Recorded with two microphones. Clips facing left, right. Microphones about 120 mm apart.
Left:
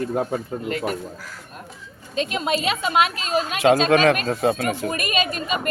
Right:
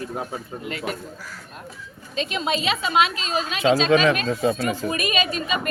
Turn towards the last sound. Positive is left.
turn(degrees=45)  # may be behind; listen again after turning